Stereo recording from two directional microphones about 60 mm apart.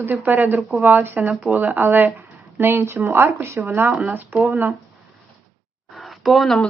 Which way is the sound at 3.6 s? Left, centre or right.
Right.